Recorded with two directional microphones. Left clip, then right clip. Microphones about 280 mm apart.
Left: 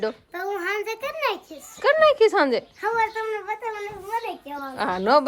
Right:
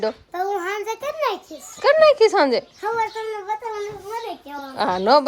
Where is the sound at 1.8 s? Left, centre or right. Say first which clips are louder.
Right 3 dB; centre.